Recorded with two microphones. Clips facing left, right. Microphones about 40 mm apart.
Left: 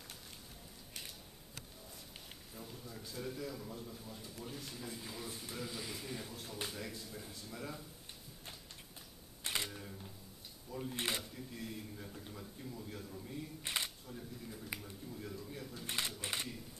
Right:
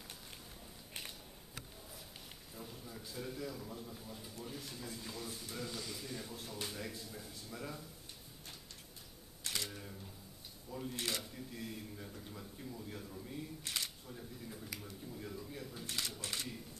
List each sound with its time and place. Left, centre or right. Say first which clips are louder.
2.5 s a man's voice: even; centre
6.3 s a man's voice: even; centre
9.4 s camera: left 2 dB; left
9.7 s camera: even; centre
10.7 s drawer open or close: left 1 dB; centre
11.2 s a man's voice: even; centre
13.6 s speech: left 4 dB; left
13.8 s a man's voice: left 1 dB; centre
16.2 s speech: left 2 dB; left